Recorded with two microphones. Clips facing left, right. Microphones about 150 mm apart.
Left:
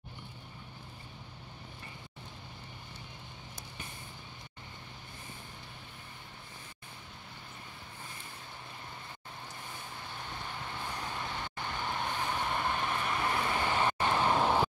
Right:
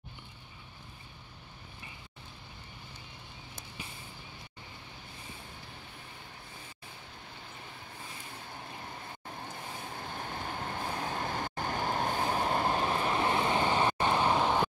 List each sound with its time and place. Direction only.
9.5 s vehicle: 50° right (ahead or behind); by 13.8 s 30° right (ahead or behind)
13.9 s vehicle: 15° right (ahead or behind)
14.3 s vehicle: 5° left (ahead or behind)